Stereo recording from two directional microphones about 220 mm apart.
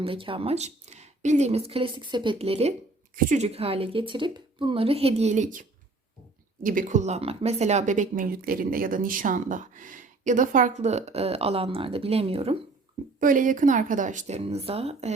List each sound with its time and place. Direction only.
0.0 s speech: 25° right (ahead or behind)
13.1 s speech: 40° right (ahead or behind)